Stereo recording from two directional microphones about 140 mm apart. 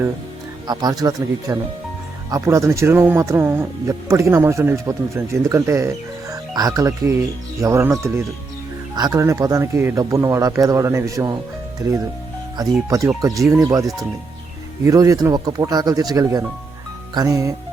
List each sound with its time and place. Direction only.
0.7 s speech: 30° right (ahead or behind)
14.8 s speech: 25° right (ahead or behind)